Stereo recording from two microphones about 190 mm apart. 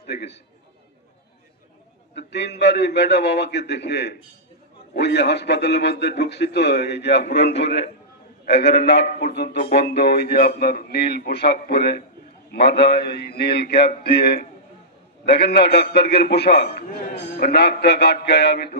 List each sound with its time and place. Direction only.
0.0 s a man's voice: 60° left (ahead or behind)
2.1 s a man's voice: 65° left (ahead or behind)
9.6 s music: 35° left (ahead or behind)
9.9 s a man's voice: 60° left (ahead or behind)